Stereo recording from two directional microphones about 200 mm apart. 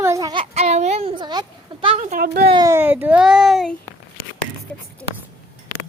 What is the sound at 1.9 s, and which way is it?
Speech, 40° right (ahead or behind).